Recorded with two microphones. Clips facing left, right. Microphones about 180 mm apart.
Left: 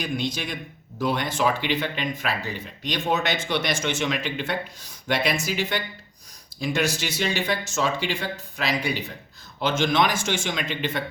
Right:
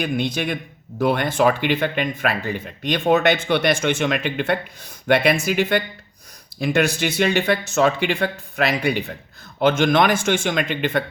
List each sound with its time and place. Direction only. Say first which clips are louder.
0.0 s speech: right 5 dB; 60° right (ahead or behind)